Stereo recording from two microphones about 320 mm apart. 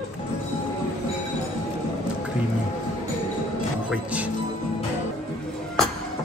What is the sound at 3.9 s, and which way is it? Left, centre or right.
Music, centre.